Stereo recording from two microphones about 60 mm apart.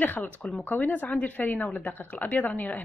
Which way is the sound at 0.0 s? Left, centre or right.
Left.